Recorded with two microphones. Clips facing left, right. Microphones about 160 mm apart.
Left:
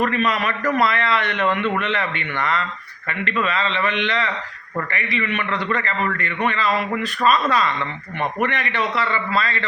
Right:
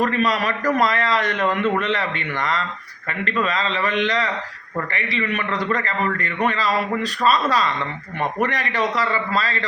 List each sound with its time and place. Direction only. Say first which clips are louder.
0.0 s a man's voice: right 1 dB; 35° right (ahead or behind)